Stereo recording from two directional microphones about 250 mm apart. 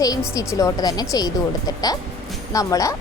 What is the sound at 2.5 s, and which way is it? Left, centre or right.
Speech, centre.